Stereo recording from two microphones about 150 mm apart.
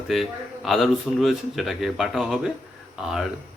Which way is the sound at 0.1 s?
Centre (ahead or behind).